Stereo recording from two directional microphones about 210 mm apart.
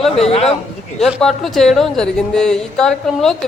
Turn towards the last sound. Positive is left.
turn(degrees=5)  # may be behind; listen again after turning